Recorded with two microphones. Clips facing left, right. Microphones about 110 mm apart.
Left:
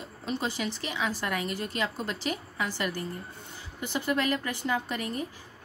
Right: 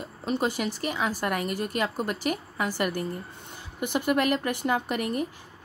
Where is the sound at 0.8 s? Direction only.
45° right (ahead or behind).